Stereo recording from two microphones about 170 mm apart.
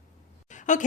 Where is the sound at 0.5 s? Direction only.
45° left (ahead or behind).